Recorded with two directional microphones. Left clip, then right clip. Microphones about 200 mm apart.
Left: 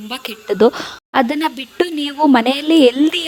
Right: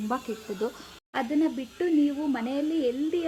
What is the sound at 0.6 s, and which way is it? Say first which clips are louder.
A woman's voice: left 19 dB; 45° left (ahead or behind).